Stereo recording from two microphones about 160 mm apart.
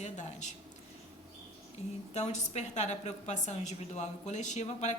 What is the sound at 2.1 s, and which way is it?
A woman's voice, 45° left (ahead or behind).